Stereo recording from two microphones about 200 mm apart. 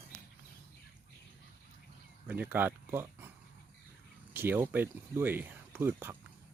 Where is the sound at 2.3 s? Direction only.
10° right (ahead or behind).